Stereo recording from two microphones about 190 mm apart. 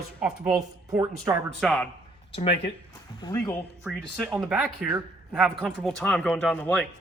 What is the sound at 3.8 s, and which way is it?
A man's voice, 5° right (ahead or behind).